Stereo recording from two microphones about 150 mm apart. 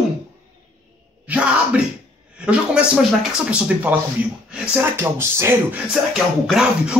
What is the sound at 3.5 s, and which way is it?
Speech, 10° right (ahead or behind).